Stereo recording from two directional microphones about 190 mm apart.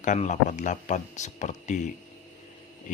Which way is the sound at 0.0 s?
40° left (ahead or behind).